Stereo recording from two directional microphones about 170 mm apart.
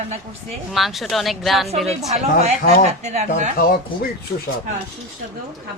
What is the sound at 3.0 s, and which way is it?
Speech, 40° right (ahead or behind).